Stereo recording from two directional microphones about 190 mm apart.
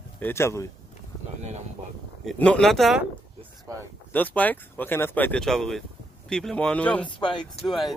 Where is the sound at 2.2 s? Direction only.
5° left (ahead or behind).